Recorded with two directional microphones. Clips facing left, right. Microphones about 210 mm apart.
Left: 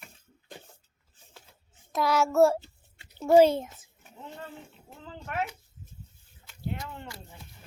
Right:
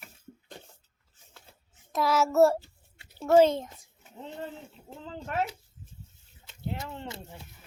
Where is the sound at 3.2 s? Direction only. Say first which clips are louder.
Left 1 dB; 10° left (ahead or behind).